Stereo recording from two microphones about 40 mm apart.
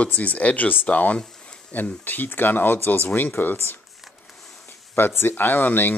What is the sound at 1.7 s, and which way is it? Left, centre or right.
Speech, left.